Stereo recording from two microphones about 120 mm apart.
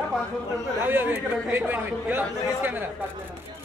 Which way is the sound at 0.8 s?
15° right (ahead or behind).